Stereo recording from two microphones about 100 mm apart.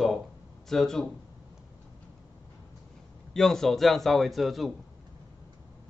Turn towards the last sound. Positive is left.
turn(degrees=0)  # may be behind; listen again after turning